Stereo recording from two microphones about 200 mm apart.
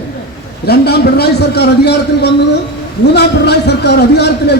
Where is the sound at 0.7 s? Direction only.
55° left (ahead or behind).